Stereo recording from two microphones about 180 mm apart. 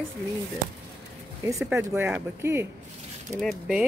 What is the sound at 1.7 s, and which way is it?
Speech, 15° right (ahead or behind).